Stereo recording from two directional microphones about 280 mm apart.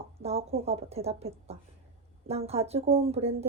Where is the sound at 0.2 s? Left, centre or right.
Right.